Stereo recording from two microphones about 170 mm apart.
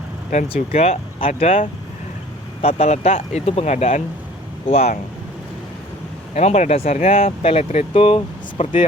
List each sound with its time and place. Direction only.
0.4 s speech: 35° left (ahead or behind)
6.3 s speech: 40° left (ahead or behind)